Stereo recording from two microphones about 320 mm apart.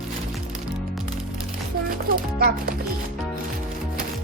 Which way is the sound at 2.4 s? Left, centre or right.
Right.